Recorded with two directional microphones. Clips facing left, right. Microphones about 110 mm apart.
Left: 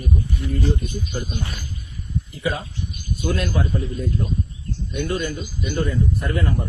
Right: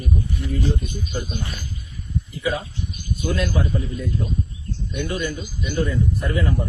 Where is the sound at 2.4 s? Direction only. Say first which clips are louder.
Right 1 dB; 60° left (ahead or behind).